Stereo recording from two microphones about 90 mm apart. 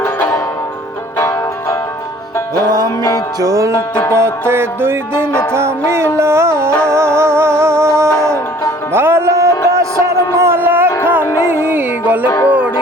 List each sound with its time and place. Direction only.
0.0 s music: 30° left (ahead or behind)
3.4 s music: 35° right (ahead or behind)
5.3 s music: 10° left (ahead or behind)
5.5 s music: 30° right (ahead or behind)